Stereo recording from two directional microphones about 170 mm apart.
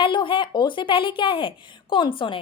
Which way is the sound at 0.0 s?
30° left (ahead or behind).